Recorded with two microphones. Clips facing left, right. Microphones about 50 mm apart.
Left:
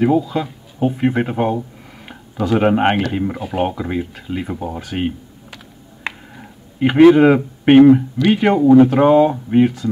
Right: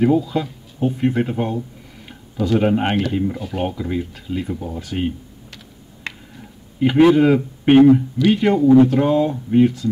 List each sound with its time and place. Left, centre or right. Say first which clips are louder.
0.0 s speech: left 1 dB; centre
0.7 s speech: left 2 dB; left
6.0 s a sound: left 4 dB; left
8.3 s speech: left 2 dB; left